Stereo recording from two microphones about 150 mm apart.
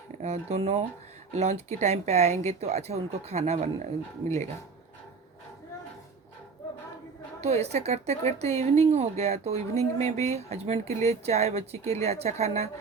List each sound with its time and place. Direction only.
0.2 s a woman's voice: 45° right (ahead or behind)
7.4 s a woman's voice: 45° right (ahead or behind)